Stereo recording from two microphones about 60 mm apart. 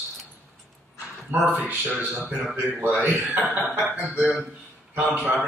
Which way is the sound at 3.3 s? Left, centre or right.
Right.